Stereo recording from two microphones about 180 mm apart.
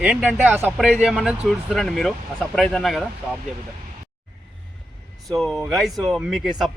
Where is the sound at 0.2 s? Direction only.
5° right (ahead or behind).